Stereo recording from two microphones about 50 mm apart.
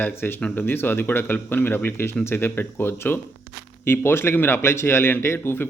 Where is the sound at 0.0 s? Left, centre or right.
Left.